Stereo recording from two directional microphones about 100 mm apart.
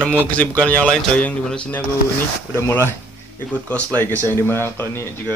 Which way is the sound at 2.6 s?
25° left (ahead or behind).